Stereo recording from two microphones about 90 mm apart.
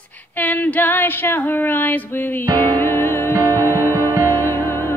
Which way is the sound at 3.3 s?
40° right (ahead or behind).